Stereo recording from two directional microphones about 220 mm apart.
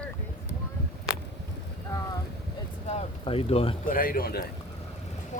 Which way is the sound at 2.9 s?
25° left (ahead or behind).